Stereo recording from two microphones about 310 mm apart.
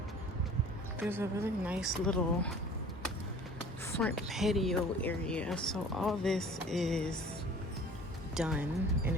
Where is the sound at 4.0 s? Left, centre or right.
Centre.